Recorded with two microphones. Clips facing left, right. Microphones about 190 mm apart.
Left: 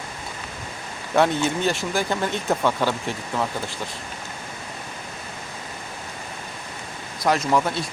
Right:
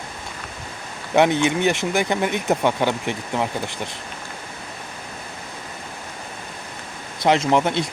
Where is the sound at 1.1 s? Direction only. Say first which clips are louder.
Right 3 dB; 20° right (ahead or behind).